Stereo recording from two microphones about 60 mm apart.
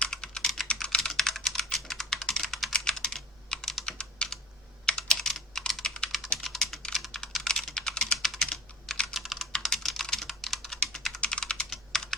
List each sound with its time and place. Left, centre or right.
0.0 s typing: centre
2.7 s computer keyboard: centre
6.4 s typing: centre
6.9 s computer keyboard: centre
9.1 s typing: centre
11.2 s typing: centre
11.7 s computer keyboard: centre